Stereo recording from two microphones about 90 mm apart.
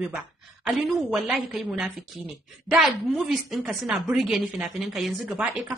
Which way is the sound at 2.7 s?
Centre (ahead or behind).